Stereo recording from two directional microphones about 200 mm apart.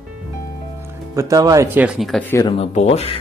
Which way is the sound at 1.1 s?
15° right (ahead or behind).